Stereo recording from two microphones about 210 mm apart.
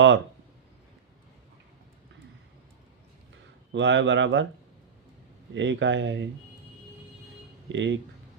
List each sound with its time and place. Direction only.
3.7 s speech: 60° right (ahead or behind)
5.5 s speech: 60° right (ahead or behind)
7.7 s speech: 60° right (ahead or behind)